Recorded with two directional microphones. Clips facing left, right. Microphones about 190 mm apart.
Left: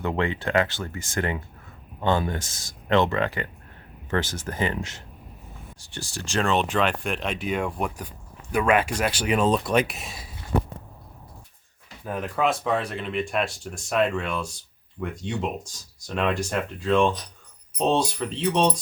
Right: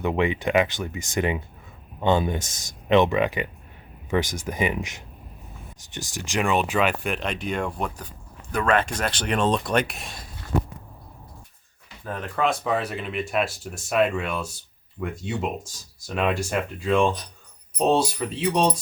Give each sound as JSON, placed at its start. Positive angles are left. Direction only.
{"t": 0.0, "sound": "speech", "side_deg": -15}
{"t": 12.0, "sound": "speech", "side_deg": 10}